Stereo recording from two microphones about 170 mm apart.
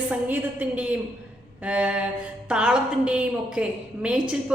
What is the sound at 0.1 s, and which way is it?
A woman's voice, 10° right (ahead or behind).